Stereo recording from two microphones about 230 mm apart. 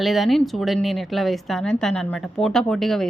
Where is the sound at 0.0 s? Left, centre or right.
Centre.